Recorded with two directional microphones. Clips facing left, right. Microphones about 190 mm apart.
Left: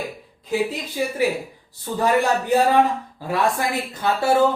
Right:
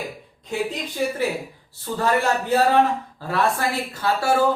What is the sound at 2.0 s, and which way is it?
Speech, 15° left (ahead or behind).